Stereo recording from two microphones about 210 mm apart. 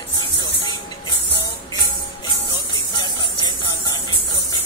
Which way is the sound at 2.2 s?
20° left (ahead or behind).